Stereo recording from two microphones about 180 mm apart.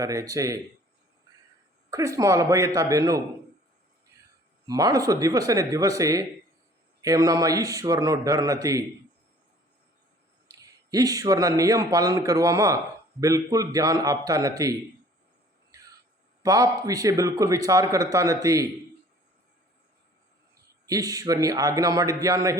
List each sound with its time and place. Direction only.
0.0 s a man's voice: 20° right (ahead or behind)
1.9 s a man's voice: 20° right (ahead or behind)
4.6 s a man's voice: 20° right (ahead or behind)
10.5 s a man's voice: 20° right (ahead or behind)
16.4 s a man's voice: 20° right (ahead or behind)
20.8 s a man's voice: 20° right (ahead or behind)